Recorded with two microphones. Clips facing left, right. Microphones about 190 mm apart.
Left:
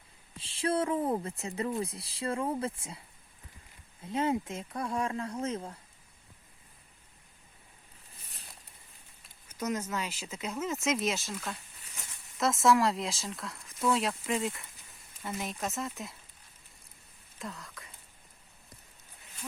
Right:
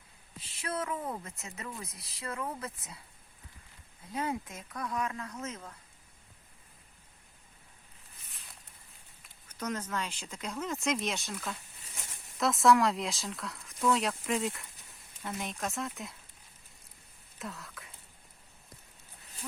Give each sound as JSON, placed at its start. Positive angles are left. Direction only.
{"t": 0.3, "sound": "speech", "side_deg": 30}
{"t": 4.0, "sound": "speech", "side_deg": 25}
{"t": 9.5, "sound": "speech", "side_deg": 10}
{"t": 17.4, "sound": "speech", "side_deg": 0}